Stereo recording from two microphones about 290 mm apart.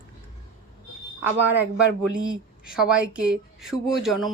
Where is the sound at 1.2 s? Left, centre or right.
Centre.